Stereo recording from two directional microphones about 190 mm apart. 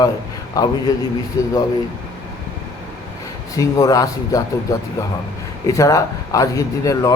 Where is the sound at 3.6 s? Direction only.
20° left (ahead or behind).